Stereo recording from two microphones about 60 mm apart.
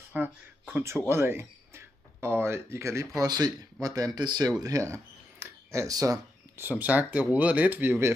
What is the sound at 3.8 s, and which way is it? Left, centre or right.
Speech, right.